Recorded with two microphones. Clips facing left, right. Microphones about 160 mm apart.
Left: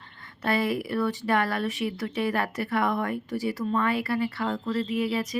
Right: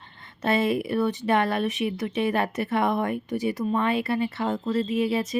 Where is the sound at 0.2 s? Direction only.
25° right (ahead or behind).